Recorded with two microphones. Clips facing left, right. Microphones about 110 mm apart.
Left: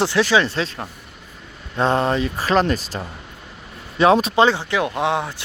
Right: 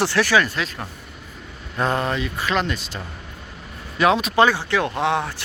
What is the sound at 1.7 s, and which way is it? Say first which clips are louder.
Speech: left 4 dB; 30° left (ahead or behind).